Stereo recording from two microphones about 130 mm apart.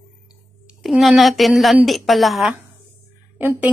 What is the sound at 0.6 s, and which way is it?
A woman's voice, centre (ahead or behind).